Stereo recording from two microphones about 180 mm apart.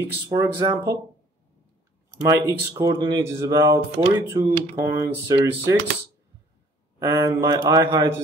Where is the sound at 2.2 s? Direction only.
20° right (ahead or behind).